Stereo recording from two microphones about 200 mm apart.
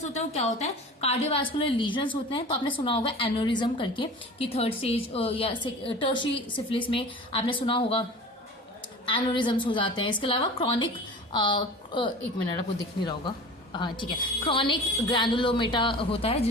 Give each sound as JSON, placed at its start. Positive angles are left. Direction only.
{"t": 0.0, "sound": "a woman's voice", "side_deg": 35}
{"t": 9.0, "sound": "a woman's voice", "side_deg": 25}
{"t": 13.7, "sound": "a woman's voice", "side_deg": 20}